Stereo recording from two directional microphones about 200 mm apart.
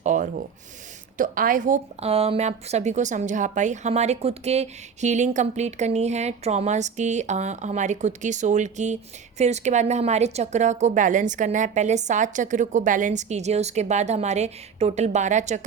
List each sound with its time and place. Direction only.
0.0 s a woman's voice: 40° right (ahead or behind)